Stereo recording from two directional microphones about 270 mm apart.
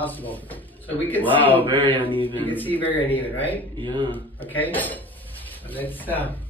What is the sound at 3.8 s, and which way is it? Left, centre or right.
Mantra, centre.